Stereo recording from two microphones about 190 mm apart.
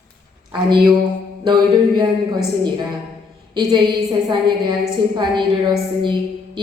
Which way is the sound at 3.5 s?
20° right (ahead or behind).